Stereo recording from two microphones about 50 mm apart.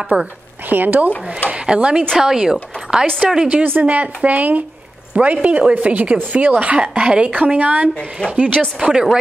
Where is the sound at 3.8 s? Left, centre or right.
Right.